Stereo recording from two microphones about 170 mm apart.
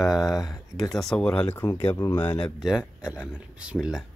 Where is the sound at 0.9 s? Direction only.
5° left (ahead or behind).